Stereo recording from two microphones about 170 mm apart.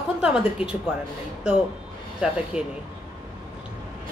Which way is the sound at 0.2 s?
5° right (ahead or behind).